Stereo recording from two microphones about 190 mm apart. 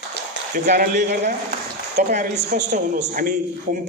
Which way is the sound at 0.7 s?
40° right (ahead or behind).